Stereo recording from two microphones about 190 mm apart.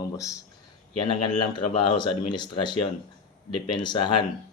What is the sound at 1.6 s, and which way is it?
Speech, 25° left (ahead or behind).